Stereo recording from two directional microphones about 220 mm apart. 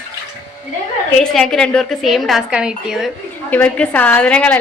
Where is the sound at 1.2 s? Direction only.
Centre (ahead or behind).